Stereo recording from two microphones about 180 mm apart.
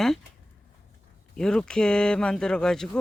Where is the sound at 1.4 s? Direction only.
5° left (ahead or behind).